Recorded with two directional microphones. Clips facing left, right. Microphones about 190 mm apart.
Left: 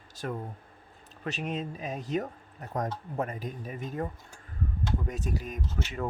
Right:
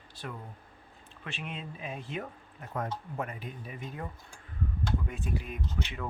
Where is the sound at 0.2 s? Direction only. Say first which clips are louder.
Left 7 dB; 45° left (ahead or behind).